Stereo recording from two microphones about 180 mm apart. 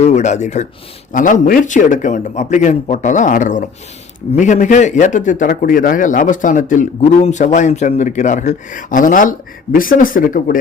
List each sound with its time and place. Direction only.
0.0 s a man's voice: 40° left (ahead or behind)